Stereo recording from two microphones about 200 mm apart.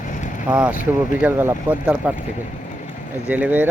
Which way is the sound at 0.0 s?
40° left (ahead or behind).